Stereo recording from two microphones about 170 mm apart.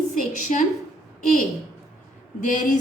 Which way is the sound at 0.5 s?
45° left (ahead or behind).